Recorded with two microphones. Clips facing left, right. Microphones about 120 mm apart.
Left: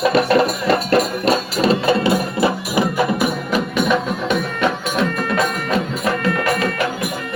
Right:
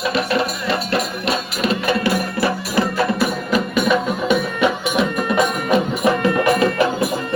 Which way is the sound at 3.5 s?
Centre (ahead or behind).